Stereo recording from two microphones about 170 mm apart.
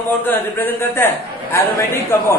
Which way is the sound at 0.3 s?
10° left (ahead or behind).